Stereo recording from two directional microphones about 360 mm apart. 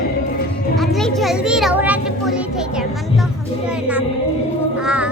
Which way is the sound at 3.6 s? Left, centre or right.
Centre.